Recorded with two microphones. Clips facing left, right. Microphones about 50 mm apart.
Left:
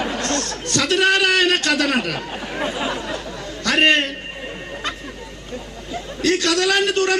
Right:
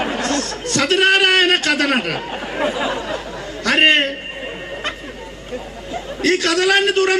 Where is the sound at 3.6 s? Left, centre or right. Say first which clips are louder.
Right 2 dB; right.